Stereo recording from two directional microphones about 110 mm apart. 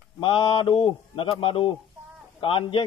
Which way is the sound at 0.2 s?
55° left (ahead or behind).